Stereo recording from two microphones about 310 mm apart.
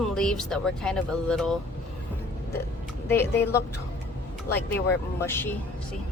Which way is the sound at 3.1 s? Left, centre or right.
Centre.